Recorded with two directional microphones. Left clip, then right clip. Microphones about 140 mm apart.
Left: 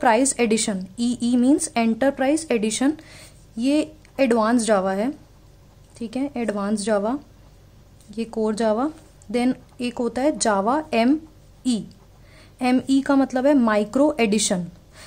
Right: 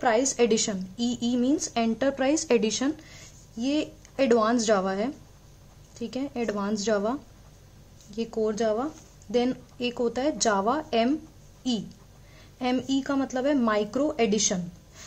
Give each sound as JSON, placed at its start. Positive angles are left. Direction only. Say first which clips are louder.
{"t": 0.4, "sound": "a woman's voice", "louder": "left 2 dB", "side_deg": 15}
{"t": 2.7, "sound": "a woman's voice", "louder": "left 6 dB", "side_deg": 20}
{"t": 9.3, "sound": "a woman's voice", "louder": "left 2 dB", "side_deg": 15}
{"t": 12.5, "sound": "a woman's voice", "louder": "left 6 dB", "side_deg": 20}
{"t": 13.8, "sound": "speech", "louder": "left 6 dB", "side_deg": 30}